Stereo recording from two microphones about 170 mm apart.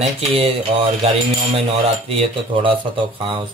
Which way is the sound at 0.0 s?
35° right (ahead or behind).